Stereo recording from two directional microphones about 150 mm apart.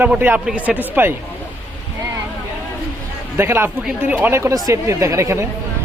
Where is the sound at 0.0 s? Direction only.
10° right (ahead or behind).